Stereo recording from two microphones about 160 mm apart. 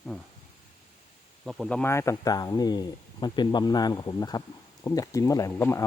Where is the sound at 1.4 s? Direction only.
Centre (ahead or behind).